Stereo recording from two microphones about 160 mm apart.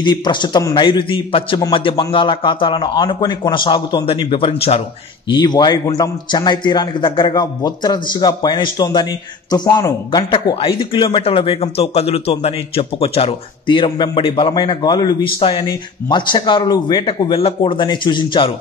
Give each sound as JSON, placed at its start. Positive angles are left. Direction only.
{"t": 0.0, "sound": "a man's voice", "side_deg": 30}
{"t": 5.3, "sound": "a man's voice", "side_deg": 25}